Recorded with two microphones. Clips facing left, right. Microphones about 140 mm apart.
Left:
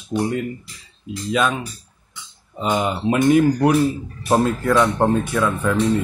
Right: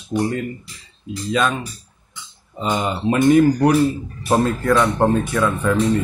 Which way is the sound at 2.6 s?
5° left (ahead or behind).